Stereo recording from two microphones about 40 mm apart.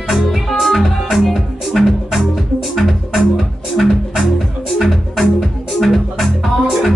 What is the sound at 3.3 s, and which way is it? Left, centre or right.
Music, centre.